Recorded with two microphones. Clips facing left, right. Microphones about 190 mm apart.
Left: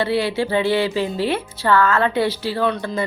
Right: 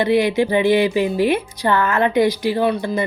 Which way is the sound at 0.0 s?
15° right (ahead or behind).